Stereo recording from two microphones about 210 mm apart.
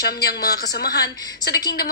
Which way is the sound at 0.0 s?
50° left (ahead or behind).